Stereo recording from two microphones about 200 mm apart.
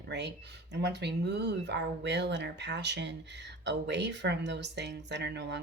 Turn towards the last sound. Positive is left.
turn(degrees=-60)  # may be behind; listen again after turning